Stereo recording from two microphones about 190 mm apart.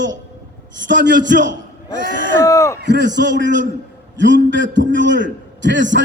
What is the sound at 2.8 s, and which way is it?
A man's voice, 65° right (ahead or behind).